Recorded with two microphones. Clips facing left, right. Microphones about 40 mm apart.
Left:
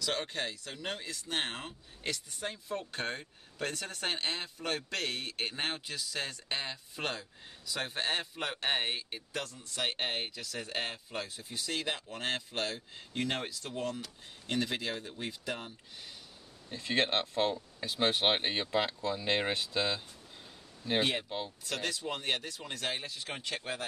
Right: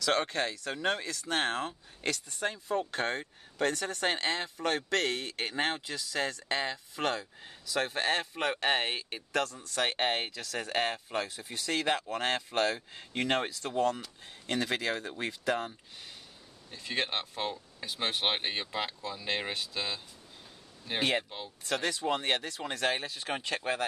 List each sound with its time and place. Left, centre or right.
0.0 s speech: right
2.0 s speech: right
4.8 s speech: right
16.7 s speech: centre
21.2 s speech: centre
21.6 s speech: right